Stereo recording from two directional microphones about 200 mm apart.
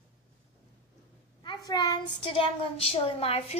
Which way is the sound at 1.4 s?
20° left (ahead or behind).